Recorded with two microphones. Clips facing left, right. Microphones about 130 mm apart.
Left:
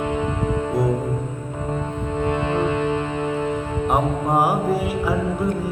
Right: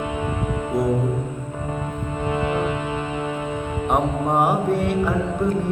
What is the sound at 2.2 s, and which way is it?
Music, 25° left (ahead or behind).